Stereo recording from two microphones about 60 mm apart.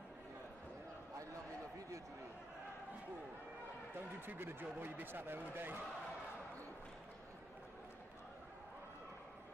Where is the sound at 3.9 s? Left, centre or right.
Right.